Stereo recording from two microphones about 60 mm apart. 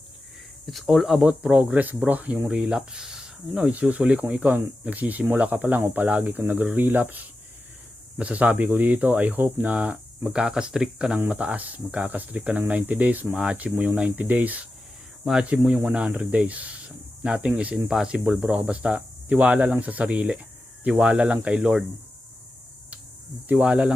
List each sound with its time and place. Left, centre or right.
0.7 s speech: centre
1.2 s speech: right
2.5 s speech: centre; by 9.6 s right
9.6 s speech: right
11.3 s speech: right
15.2 s speech: centre
15.4 s speech: right
23.5 s speech: right